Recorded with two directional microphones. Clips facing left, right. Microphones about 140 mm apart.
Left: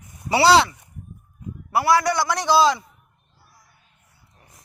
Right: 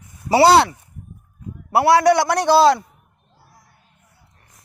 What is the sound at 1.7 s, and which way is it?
A man's voice, 65° right (ahead or behind).